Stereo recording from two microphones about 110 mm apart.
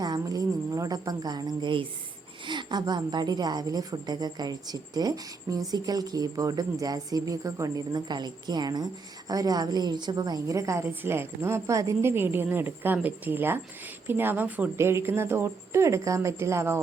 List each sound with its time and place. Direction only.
0.0 s a woman's voice: 35° right (ahead or behind)